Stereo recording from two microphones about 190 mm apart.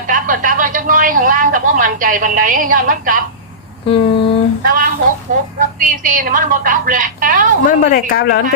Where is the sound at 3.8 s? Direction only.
30° left (ahead or behind).